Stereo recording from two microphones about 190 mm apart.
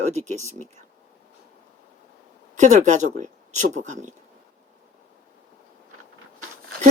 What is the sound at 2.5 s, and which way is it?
Speech, 40° right (ahead or behind).